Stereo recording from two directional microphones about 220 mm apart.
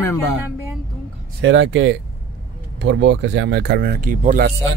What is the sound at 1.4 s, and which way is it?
Speech, 60° right (ahead or behind).